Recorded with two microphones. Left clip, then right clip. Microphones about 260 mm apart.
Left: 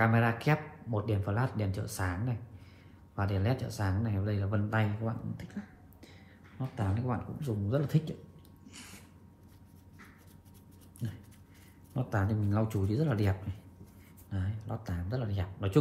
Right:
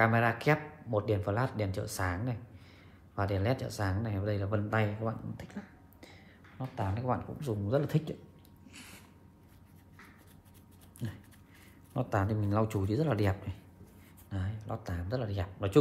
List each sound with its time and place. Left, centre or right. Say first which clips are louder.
0.0 s speech: right 2 dB; right
6.8 s speech: right 3 dB; right
7.3 s speech: right 2 dB; right
11.9 s speech: right 2 dB; right